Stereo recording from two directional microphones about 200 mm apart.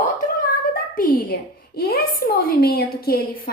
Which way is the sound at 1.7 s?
50° left (ahead or behind).